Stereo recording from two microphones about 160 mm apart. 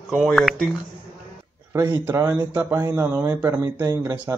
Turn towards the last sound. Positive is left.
turn(degrees=-20)  # may be behind; listen again after turning